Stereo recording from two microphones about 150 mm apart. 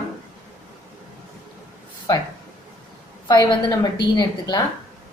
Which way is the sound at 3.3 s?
30° left (ahead or behind).